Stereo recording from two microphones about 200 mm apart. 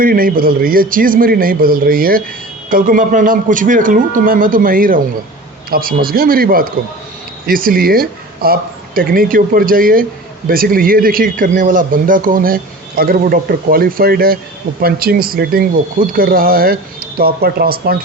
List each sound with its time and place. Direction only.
0.0 s speech: 45° right (ahead or behind)